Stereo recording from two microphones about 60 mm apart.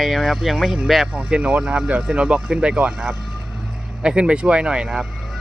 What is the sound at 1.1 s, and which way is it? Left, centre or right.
Speech, right.